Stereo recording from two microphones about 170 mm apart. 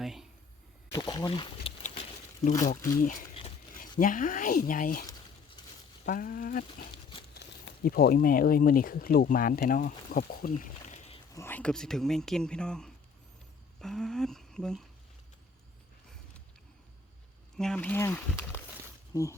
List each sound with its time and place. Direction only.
0.0 s a sound: centre (ahead or behind)
0.9 s speech: 20° left (ahead or behind)
1.8 s a sound: 45° left (ahead or behind)
3.0 s speech: 50° left (ahead or behind)
6.1 s speech: 55° left (ahead or behind)
7.3 s speech: 70° left (ahead or behind)
10.6 s a sound: 40° left (ahead or behind)
11.3 s speech: 10° left (ahead or behind)
17.6 s speech: 5° left (ahead or behind)